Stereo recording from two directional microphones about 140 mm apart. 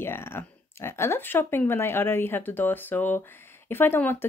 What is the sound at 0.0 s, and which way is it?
Speech, 15° left (ahead or behind).